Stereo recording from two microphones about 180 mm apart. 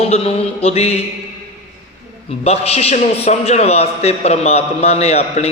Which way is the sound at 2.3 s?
35° left (ahead or behind).